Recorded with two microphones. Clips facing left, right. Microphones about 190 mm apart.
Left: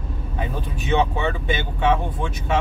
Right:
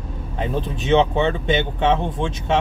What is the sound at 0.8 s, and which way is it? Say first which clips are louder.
Speech: right 4 dB; 25° right (ahead or behind).